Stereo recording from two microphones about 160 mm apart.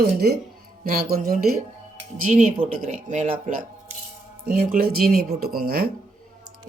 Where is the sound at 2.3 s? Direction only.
50° right (ahead or behind).